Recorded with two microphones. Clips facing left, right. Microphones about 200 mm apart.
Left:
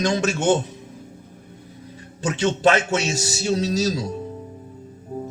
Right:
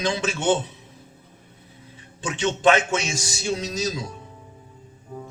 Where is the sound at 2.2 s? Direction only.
40° left (ahead or behind).